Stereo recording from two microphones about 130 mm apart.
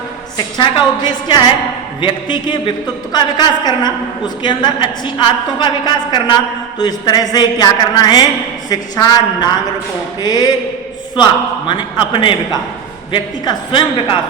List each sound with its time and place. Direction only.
0.3 s a woman's voice: 35° left (ahead or behind)
11.7 s a woman's voice: 35° left (ahead or behind)